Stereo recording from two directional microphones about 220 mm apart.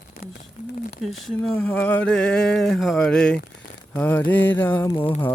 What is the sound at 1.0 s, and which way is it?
Speech, centre (ahead or behind).